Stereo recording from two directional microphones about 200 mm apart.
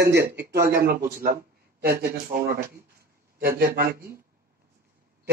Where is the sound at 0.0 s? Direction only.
55° right (ahead or behind).